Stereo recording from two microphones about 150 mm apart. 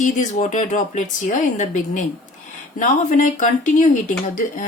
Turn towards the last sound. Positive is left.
turn(degrees=60)  # may be behind; listen again after turning